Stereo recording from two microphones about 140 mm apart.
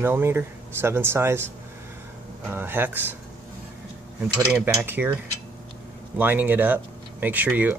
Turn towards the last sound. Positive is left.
turn(degrees=-10)  # may be behind; listen again after turning